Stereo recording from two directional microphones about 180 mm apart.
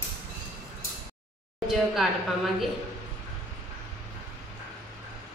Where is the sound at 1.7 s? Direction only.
Centre (ahead or behind).